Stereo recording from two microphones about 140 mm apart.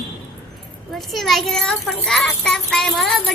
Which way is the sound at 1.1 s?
Centre (ahead or behind).